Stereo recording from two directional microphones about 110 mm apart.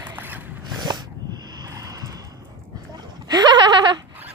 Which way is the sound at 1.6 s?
35° right (ahead or behind).